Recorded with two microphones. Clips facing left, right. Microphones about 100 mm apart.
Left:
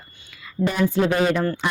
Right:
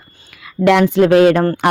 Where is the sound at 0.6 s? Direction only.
85° right; by 1.7 s 55° right (ahead or behind).